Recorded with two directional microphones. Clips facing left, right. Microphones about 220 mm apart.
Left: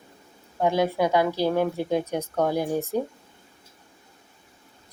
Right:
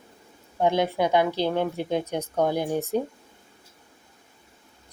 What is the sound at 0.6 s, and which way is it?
A woman's voice, 20° right (ahead or behind).